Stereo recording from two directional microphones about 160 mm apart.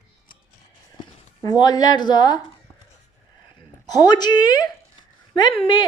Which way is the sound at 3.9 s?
25° left (ahead or behind).